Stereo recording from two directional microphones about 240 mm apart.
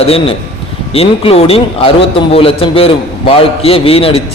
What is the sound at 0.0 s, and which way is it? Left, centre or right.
A man's voice, left.